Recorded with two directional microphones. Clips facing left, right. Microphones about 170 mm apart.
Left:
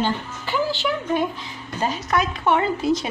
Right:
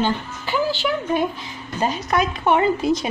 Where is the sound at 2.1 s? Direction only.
15° right (ahead or behind).